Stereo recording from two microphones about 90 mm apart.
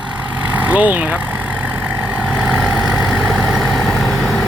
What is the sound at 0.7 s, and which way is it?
Speech, 20° right (ahead or behind).